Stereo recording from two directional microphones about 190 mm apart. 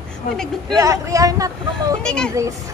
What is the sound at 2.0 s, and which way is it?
Speech, 5° left (ahead or behind).